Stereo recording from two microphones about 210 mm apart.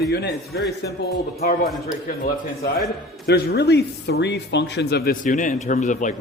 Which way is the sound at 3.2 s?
50° left (ahead or behind).